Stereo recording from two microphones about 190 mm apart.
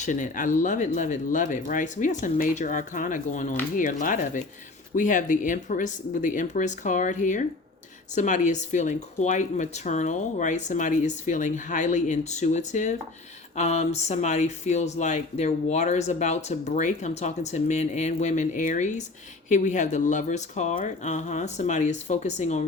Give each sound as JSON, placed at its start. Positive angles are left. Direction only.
{"t": 0.0, "sound": "speech", "side_deg": 40}